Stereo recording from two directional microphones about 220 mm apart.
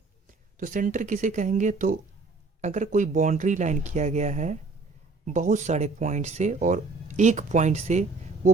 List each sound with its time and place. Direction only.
0.6 s speech: 35° right (ahead or behind)